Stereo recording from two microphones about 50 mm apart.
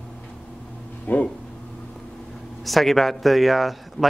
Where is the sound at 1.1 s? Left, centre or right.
Left.